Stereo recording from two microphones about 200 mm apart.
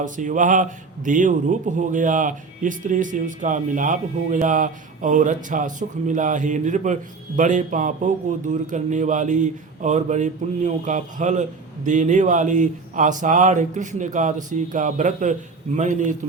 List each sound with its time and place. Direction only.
0.0 s speech: 40° right (ahead or behind)